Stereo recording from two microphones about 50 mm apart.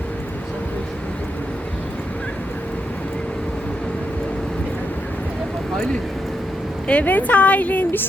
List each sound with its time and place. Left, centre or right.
6.8 s a woman's voice: left